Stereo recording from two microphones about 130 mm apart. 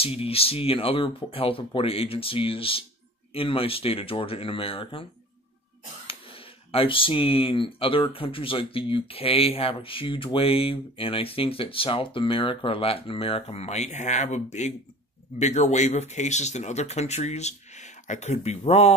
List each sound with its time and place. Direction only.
0.0 s speech: 45° left (ahead or behind)
6.0 s speech: 45° left (ahead or behind)